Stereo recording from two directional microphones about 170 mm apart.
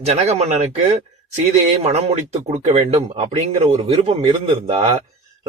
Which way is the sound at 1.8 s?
40° right (ahead or behind).